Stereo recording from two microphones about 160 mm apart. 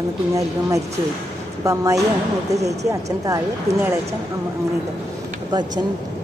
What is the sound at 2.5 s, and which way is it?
Speech, 45° right (ahead or behind).